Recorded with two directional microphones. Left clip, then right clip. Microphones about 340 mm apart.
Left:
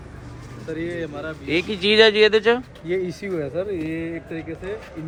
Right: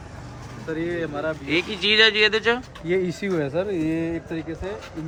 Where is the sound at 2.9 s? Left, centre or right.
Right.